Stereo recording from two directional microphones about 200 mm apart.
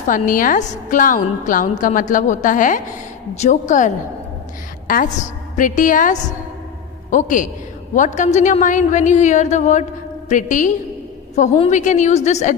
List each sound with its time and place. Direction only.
0.0 s a woman's voice: 40° left (ahead or behind)